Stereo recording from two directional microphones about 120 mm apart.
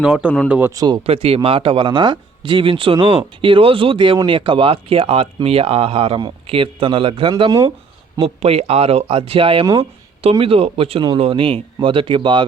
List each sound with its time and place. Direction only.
0.0 s speech: 5° right (ahead or behind)
0.7 s speech: 30° right (ahead or behind)
1.0 s speech: 55° right (ahead or behind)